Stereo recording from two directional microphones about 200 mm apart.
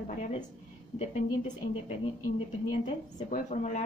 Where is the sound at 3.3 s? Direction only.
35° left (ahead or behind).